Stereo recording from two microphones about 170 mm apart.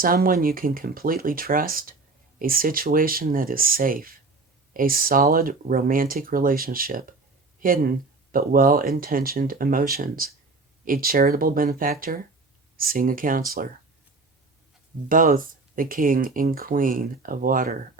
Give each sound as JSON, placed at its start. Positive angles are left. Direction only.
{"t": 0.0, "sound": "speech", "side_deg": -55}
{"t": 15.1, "sound": "speech", "side_deg": -55}